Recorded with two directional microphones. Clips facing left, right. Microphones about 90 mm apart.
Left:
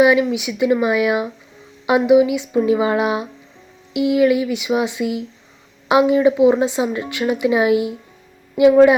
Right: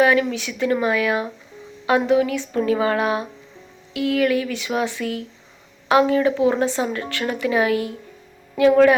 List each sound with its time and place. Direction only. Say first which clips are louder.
0.0 s speech: left 3 dB; 15° left (ahead or behind)